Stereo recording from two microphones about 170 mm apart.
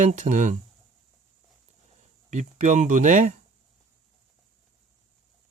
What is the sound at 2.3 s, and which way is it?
Speech, 45° right (ahead or behind).